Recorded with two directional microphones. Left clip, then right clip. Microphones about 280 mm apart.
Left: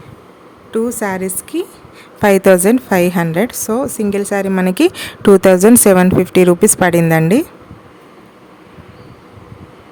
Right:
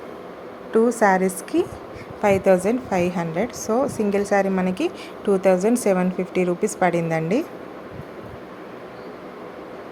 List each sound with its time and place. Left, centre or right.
0.7 s speech: left
2.2 s a woman's voice: left